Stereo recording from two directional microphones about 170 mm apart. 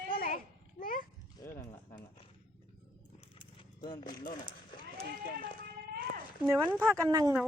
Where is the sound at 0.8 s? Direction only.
55° left (ahead or behind).